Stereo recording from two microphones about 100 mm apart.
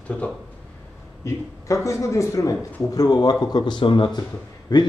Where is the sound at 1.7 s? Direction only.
30° left (ahead or behind).